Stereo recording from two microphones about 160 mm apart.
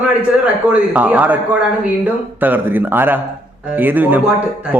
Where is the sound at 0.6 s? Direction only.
10° right (ahead or behind).